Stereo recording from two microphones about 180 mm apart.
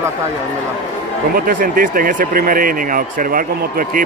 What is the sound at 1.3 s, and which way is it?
Speech, 50° right (ahead or behind).